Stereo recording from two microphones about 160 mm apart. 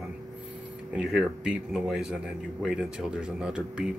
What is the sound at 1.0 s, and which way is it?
Speech, 5° right (ahead or behind).